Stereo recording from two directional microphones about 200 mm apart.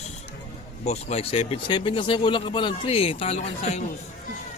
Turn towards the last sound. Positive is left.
turn(degrees=30)  # may be behind; listen again after turning